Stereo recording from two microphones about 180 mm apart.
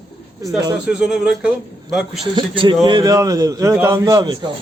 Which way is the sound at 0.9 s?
5° right (ahead or behind).